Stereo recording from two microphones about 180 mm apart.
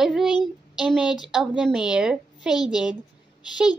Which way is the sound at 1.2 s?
Centre (ahead or behind).